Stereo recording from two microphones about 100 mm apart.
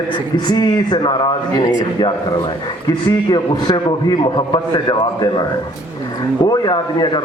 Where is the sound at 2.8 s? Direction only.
45° left (ahead or behind).